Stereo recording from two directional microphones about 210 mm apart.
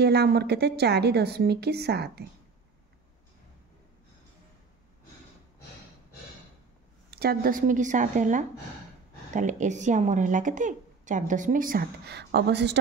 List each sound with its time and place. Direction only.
0.0 s a woman's voice: 50° right (ahead or behind)
7.1 s speech: 50° right (ahead or behind)